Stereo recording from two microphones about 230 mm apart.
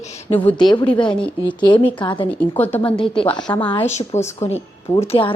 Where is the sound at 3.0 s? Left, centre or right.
Left.